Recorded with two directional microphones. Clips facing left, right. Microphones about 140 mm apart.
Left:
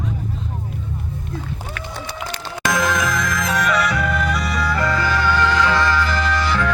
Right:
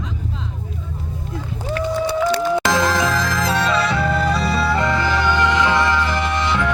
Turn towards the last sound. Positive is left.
turn(degrees=-20)  # may be behind; listen again after turning